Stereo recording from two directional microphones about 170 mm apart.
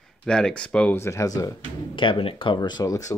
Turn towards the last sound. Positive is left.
turn(degrees=20)  # may be behind; listen again after turning